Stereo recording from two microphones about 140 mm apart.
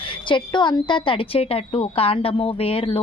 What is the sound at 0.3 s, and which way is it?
A woman's voice, 35° left (ahead or behind).